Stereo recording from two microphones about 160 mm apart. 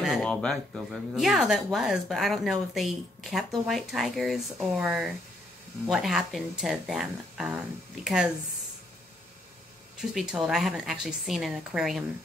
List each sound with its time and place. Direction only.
0.0 s speech: centre (ahead or behind)
10.1 s speech: 5° right (ahead or behind)